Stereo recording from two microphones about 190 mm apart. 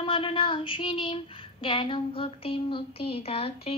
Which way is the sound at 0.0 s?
30° left (ahead or behind).